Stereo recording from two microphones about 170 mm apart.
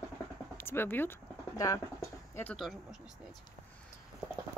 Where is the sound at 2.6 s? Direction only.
Centre (ahead or behind).